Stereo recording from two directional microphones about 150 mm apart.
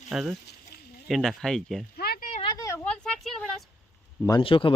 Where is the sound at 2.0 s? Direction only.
90° left.